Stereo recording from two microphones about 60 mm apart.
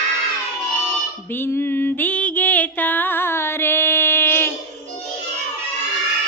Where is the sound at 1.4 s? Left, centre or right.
Left.